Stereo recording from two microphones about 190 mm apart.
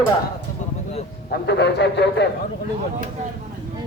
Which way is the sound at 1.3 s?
60° left (ahead or behind).